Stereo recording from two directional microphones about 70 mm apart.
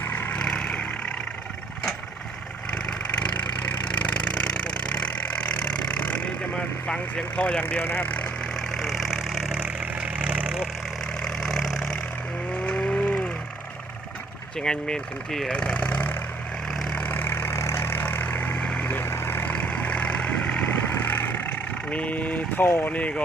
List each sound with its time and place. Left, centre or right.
0.0 s vehicle: left
0.3 s vehicle: centre
2.7 s vehicle: centre
6.8 s speech: centre
7.6 s speech: left
8.5 s engine: centre
10.1 s vehicle: centre
11.2 s vehicle: centre
14.6 s speech: centre
16.7 s vehicle: centre
17.0 s vehicle: left
19.0 s vehicle: left
19.5 s vehicle: centre